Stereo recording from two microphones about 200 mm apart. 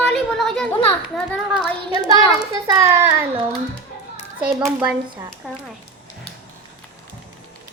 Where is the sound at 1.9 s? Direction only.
20° right (ahead or behind).